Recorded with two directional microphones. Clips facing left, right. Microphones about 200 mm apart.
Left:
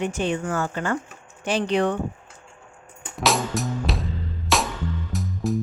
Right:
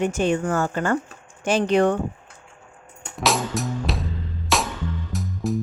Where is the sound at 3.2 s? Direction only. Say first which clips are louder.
Even; centre (ahead or behind).